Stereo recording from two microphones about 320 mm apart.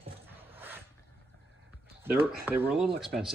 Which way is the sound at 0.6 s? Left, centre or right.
Centre.